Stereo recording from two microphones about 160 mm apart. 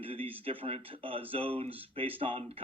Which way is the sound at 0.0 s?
35° right (ahead or behind).